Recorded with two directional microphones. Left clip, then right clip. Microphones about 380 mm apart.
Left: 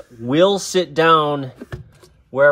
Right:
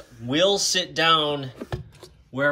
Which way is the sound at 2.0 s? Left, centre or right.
Centre.